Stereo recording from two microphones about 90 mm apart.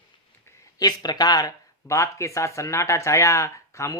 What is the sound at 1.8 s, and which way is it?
Speech, 35° left (ahead or behind).